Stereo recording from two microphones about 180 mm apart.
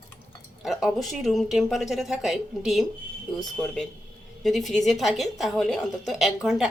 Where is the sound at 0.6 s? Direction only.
Centre (ahead or behind).